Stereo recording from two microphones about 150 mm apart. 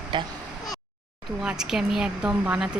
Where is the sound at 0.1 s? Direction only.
30° right (ahead or behind).